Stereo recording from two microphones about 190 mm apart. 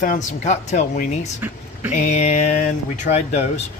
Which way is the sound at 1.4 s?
10° right (ahead or behind).